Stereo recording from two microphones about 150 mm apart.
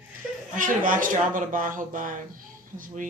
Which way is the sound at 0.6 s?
65° right (ahead or behind).